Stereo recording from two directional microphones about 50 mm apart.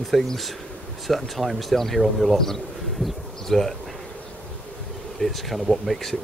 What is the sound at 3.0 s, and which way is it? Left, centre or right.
Bee, centre.